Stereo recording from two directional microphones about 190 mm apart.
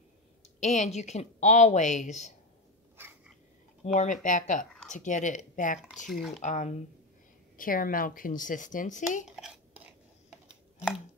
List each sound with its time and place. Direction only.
0.6 s speech: 35° left (ahead or behind)
3.8 s speech: 40° left (ahead or behind)
9.3 s whispering: 5° right (ahead or behind)
10.5 s a sound: 5° right (ahead or behind)